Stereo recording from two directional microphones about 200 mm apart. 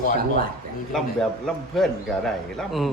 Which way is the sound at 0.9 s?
Centre (ahead or behind).